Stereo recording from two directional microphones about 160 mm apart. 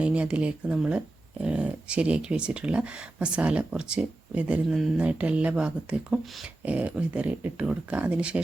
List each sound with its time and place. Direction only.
0.0 s speech: 10° right (ahead or behind)